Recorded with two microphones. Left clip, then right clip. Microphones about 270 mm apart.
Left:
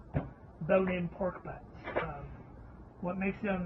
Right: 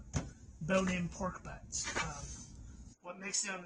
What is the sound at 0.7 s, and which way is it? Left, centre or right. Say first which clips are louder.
Speech: left 5 dB; right.